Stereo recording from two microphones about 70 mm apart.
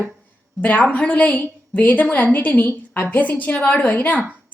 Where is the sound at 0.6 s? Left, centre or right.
Left.